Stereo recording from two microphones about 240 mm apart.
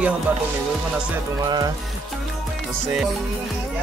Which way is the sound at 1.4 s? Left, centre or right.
Centre.